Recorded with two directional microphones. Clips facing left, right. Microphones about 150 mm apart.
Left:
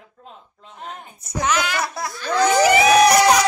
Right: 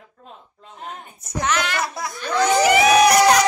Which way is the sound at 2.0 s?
15° right (ahead or behind).